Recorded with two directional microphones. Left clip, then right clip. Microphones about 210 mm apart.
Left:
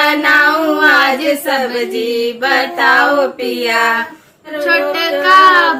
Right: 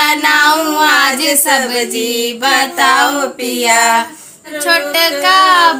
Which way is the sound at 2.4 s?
50° right (ahead or behind).